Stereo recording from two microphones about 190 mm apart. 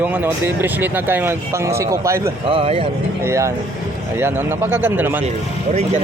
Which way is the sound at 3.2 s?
15° right (ahead or behind).